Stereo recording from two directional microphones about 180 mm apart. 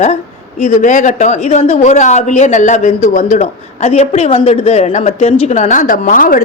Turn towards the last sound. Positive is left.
turn(degrees=50)  # may be behind; listen again after turning